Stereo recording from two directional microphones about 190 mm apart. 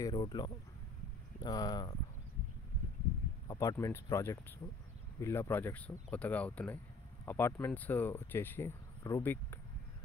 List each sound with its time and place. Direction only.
0.0 s speech: 20° left (ahead or behind)
3.4 s speech: 15° left (ahead or behind)